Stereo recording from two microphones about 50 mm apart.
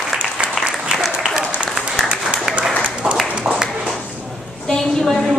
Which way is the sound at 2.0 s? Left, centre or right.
Right.